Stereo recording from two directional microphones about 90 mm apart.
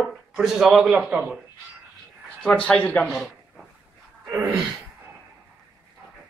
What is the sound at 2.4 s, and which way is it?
Speech, 10° left (ahead or behind).